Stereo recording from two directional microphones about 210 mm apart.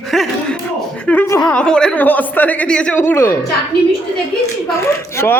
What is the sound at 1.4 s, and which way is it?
Speech, 5° left (ahead or behind).